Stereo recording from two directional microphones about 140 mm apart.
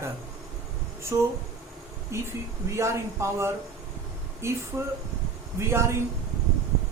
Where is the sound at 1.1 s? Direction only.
20° right (ahead or behind).